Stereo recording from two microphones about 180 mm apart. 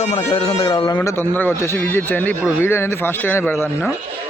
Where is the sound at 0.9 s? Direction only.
10° left (ahead or behind).